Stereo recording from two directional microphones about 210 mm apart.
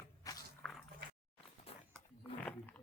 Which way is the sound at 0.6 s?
Centre (ahead or behind).